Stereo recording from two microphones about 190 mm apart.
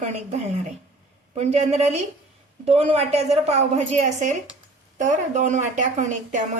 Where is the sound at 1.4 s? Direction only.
35° right (ahead or behind).